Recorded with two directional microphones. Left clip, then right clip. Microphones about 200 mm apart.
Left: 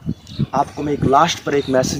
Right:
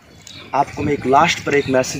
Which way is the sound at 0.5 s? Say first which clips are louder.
Right 1 dB; 5° left (ahead or behind).